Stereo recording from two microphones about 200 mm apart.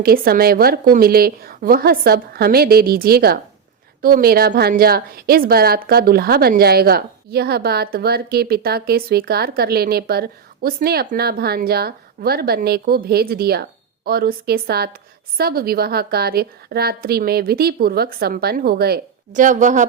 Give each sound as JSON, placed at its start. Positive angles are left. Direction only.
{"t": 0.0, "sound": "a woman's voice", "side_deg": -50}